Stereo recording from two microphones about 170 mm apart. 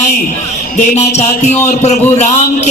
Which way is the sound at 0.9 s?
40° left (ahead or behind).